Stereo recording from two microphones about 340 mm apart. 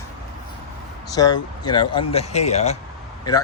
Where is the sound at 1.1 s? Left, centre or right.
Centre.